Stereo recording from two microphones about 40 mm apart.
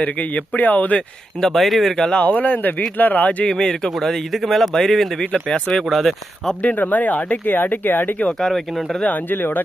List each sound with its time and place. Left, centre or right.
0.0 s speech: left
1.4 s speech: centre
2.2 s speech: left
3.5 s speech: centre
5.2 s speech: left
5.9 s speech: centre
6.7 s speech: left
8.3 s speech: centre
9.3 s speech: left